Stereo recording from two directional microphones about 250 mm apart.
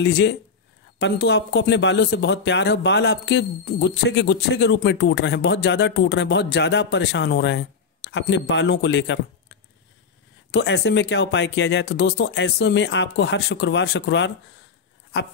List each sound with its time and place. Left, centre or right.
0.0 s speech: left
10.5 s speech: left